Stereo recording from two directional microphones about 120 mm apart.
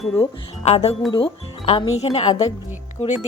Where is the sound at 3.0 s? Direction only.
50° left (ahead or behind).